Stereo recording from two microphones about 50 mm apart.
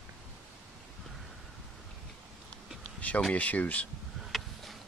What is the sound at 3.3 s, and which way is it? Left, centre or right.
Speech, left.